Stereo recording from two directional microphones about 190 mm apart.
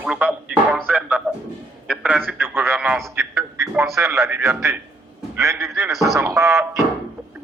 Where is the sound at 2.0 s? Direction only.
10° right (ahead or behind).